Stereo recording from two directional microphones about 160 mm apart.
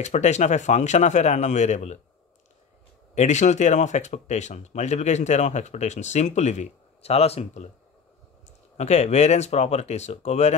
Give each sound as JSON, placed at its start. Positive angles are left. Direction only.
{"t": 0.0, "sound": "speech", "side_deg": 45}
{"t": 3.2, "sound": "speech", "side_deg": 45}
{"t": 8.7, "sound": "speech", "side_deg": 45}